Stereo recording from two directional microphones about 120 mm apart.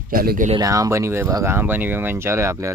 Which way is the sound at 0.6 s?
25° right (ahead or behind).